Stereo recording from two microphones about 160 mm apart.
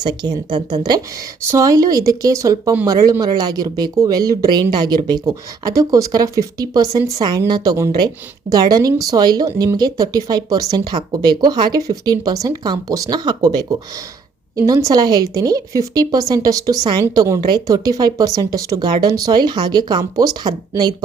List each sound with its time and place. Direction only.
0.0 s a woman's voice: 25° right (ahead or behind)